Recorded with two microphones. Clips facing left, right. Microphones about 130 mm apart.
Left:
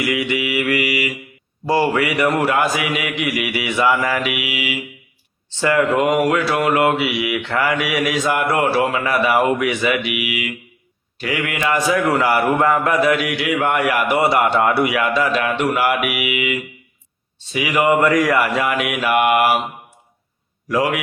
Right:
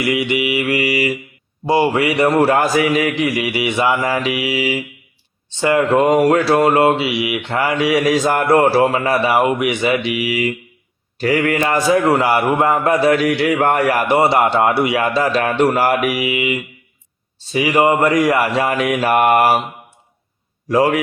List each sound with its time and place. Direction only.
0.0 s mantra: 25° right (ahead or behind)
1.6 s mantra: 20° right (ahead or behind); by 4.8 s 35° right (ahead or behind)
5.5 s a man's voice: 20° right (ahead or behind); by 19.6 s 40° right (ahead or behind)
20.7 s a man's voice: 30° right (ahead or behind)